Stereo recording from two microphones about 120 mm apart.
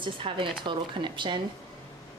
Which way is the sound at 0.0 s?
45° right (ahead or behind).